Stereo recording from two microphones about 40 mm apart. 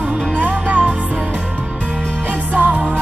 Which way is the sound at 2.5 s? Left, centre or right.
Right.